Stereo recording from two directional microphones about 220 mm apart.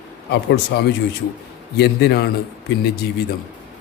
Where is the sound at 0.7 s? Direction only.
50° left (ahead or behind).